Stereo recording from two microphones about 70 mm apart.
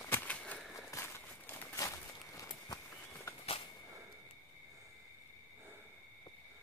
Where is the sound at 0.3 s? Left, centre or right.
Centre.